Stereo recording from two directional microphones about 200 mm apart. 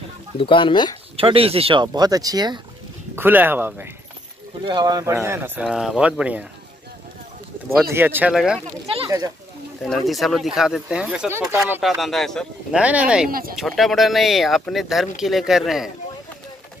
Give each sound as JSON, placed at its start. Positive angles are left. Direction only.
{"t": 0.4, "sound": "speech", "side_deg": 25}
{"t": 1.1, "sound": "speech", "side_deg": -30}
{"t": 3.2, "sound": "speech", "side_deg": -10}
{"t": 4.6, "sound": "speech", "side_deg": -20}
{"t": 7.9, "sound": "speech", "side_deg": -10}
{"t": 9.8, "sound": "speech", "side_deg": 0}
{"t": 13.3, "sound": "speech", "side_deg": -45}
{"t": 13.6, "sound": "speech", "side_deg": 0}